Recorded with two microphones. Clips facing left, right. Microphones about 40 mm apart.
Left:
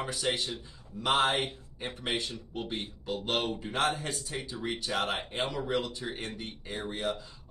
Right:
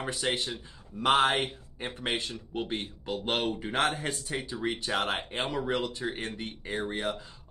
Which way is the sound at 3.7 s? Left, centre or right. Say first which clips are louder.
Right 1 dB; right.